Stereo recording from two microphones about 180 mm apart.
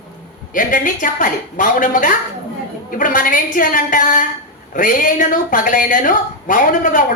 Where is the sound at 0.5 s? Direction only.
45° left (ahead or behind).